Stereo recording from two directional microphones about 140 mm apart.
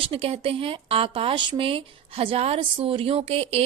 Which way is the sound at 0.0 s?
40° right (ahead or behind).